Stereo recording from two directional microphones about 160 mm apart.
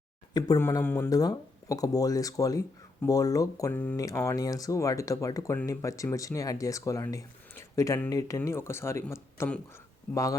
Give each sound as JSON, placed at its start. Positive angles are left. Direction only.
{"t": 0.3, "sound": "speech", "side_deg": 25}
{"t": 0.6, "sound": "speech", "side_deg": 15}